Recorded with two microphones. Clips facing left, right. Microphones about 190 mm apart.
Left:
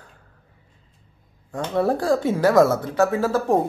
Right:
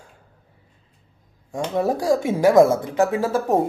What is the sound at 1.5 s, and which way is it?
A man's voice, 10° right (ahead or behind).